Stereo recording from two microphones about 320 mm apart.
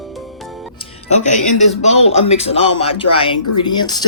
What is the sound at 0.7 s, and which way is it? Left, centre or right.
Speech, centre.